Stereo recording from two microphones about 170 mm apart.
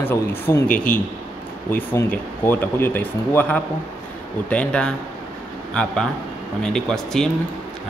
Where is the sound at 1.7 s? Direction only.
10° left (ahead or behind).